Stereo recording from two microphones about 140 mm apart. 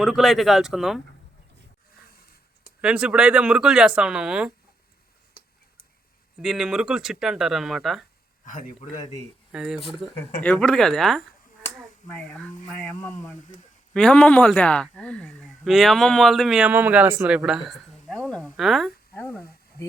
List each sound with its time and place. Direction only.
0.0 s speech: centre (ahead or behind)
2.8 s speech: 5° right (ahead or behind)
6.4 s speech: centre (ahead or behind)
8.4 s speech: 65° left (ahead or behind)
9.5 s speech: 5° right (ahead or behind)
10.4 s speech: 10° left (ahead or behind)
12.9 s speech: 20° left (ahead or behind)
13.9 s speech: 5° left (ahead or behind)
19.1 s speech: 10° left (ahead or behind)